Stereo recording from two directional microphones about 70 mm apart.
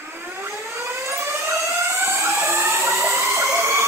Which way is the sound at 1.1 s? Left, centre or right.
Right.